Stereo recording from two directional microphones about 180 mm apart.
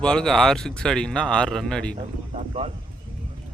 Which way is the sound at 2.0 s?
35° right (ahead or behind).